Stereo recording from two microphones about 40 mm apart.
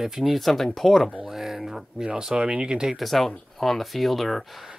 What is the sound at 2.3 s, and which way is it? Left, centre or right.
Speech, right.